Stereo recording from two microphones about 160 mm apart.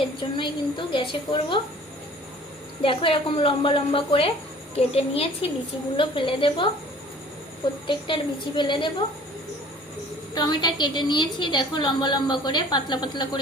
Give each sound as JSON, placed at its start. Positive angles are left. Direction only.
{"t": 0.2, "sound": "a woman's voice", "side_deg": 30}
{"t": 2.8, "sound": "a woman's voice", "side_deg": 35}
{"t": 7.9, "sound": "a woman's voice", "side_deg": 30}
{"t": 10.3, "sound": "a woman's voice", "side_deg": 25}